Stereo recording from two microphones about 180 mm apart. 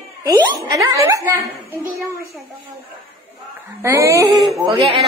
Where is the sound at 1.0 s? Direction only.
15° right (ahead or behind).